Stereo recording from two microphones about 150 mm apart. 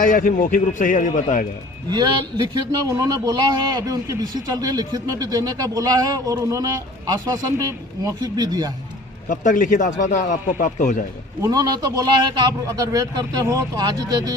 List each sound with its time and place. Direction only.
0.0 s a man's voice: 65° left (ahead or behind)
1.9 s a man's voice: 30° right (ahead or behind)
9.3 s a man's voice: 60° left (ahead or behind)
11.4 s a man's voice: 25° right (ahead or behind)